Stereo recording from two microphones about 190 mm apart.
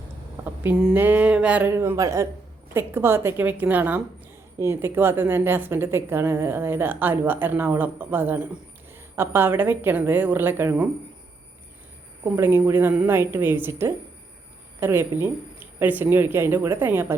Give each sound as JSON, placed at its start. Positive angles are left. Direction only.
{"t": 0.6, "sound": "a woman's voice", "side_deg": -10}
{"t": 12.2, "sound": "a woman's voice", "side_deg": -10}